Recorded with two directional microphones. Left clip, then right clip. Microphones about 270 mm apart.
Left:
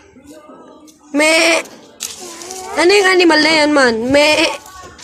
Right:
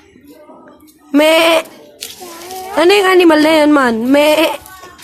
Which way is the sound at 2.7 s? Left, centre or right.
Right.